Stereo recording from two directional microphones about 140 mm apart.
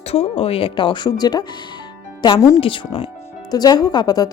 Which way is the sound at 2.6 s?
40° left (ahead or behind).